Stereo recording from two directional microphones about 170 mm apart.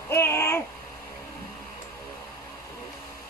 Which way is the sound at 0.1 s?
15° left (ahead or behind).